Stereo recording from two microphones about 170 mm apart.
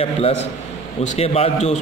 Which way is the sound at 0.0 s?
35° left (ahead or behind).